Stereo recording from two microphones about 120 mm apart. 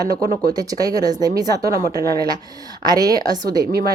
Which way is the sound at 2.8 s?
35° right (ahead or behind).